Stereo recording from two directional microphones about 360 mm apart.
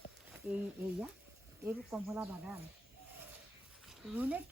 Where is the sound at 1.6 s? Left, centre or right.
Centre.